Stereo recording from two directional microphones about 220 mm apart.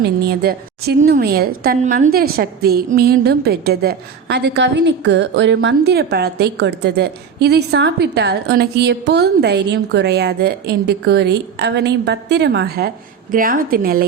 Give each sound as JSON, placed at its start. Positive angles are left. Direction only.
{"t": 0.0, "sound": "a woman's voice", "side_deg": -45}